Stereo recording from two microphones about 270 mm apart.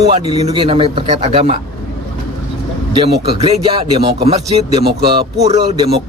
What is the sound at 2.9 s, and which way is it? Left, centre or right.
A man's voice, centre.